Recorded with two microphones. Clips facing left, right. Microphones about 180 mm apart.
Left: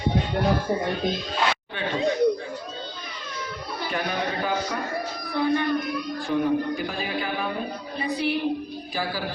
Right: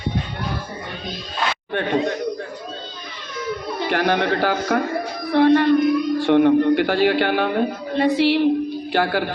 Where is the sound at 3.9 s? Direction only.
75° right (ahead or behind).